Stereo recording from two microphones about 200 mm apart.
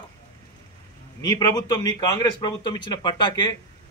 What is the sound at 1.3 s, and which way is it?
Speech, 20° left (ahead or behind).